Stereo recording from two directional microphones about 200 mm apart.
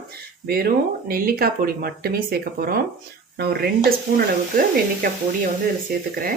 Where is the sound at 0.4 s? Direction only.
50° right (ahead or behind).